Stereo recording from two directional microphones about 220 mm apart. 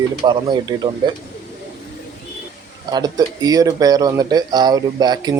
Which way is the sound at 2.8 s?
20° right (ahead or behind).